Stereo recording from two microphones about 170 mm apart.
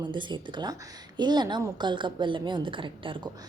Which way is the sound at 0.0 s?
25° right (ahead or behind).